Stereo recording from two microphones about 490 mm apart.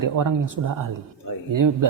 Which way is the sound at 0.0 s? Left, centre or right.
Right.